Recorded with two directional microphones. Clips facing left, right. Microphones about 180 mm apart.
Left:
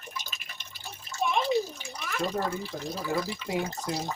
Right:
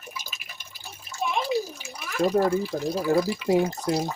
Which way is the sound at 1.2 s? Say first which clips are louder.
Even; 5° right (ahead or behind).